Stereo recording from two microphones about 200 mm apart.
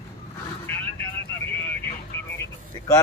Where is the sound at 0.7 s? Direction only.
10° left (ahead or behind).